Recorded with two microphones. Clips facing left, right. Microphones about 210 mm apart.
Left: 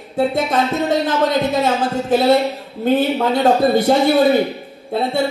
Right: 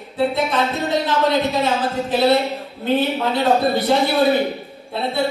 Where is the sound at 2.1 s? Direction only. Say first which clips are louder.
Left 3 dB; 45° left (ahead or behind).